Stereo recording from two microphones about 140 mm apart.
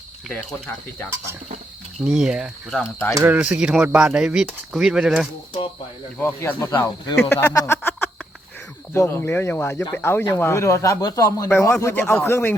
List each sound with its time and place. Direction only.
2.0 s speech: 5° right (ahead or behind)
3.2 s speech: 15° right (ahead or behind)
6.1 s speech: 15° left (ahead or behind)
7.5 s a sound: 25° left (ahead or behind)
7.8 s a sound: 15° left (ahead or behind)
8.9 s speech: 15° left (ahead or behind)